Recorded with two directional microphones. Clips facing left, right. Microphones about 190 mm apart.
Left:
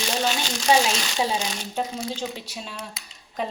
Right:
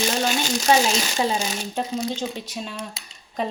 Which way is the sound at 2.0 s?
20° right (ahead or behind).